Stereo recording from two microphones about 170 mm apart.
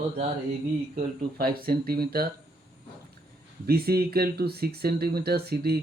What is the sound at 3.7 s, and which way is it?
Speech, 65° right (ahead or behind).